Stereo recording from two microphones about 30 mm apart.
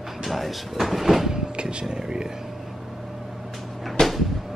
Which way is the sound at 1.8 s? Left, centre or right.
Right.